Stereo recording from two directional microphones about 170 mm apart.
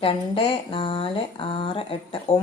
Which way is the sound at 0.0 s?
30° left (ahead or behind).